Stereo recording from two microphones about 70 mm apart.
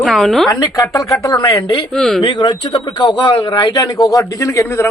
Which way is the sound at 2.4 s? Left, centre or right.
Left.